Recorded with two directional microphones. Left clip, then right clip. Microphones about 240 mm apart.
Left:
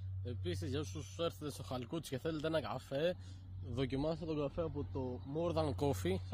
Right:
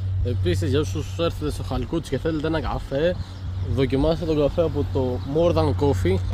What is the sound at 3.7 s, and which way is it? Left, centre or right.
Speech, left.